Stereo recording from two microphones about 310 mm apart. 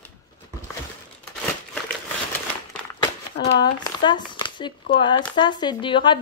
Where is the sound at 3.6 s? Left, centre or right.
Centre.